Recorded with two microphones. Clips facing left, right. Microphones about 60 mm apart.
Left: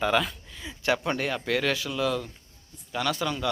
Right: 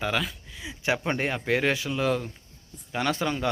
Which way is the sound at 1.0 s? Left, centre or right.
Right.